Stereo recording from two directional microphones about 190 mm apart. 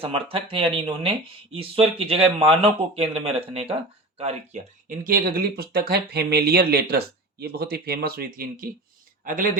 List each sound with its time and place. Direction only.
0.0 s speech: 30° right (ahead or behind); by 9.5 s 45° right (ahead or behind)